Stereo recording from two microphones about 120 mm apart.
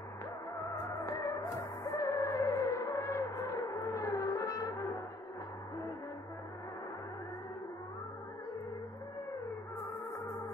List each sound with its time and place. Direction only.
0.7 s music: 25° left (ahead or behind)